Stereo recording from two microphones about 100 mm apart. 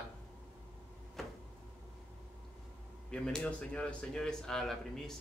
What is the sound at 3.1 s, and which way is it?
Speech, 10° left (ahead or behind).